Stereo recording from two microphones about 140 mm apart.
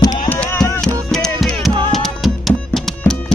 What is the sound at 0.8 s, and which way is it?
Music, 5° left (ahead or behind).